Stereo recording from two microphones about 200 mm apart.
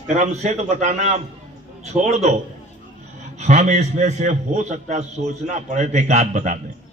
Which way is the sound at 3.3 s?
35° right (ahead or behind).